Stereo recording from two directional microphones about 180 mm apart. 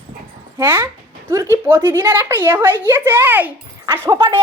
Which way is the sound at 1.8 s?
10° right (ahead or behind).